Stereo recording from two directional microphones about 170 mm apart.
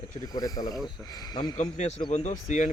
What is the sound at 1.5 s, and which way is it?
Speech, 45° left (ahead or behind).